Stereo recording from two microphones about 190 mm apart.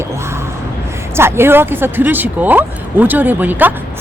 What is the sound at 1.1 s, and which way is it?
Speech, 15° right (ahead or behind).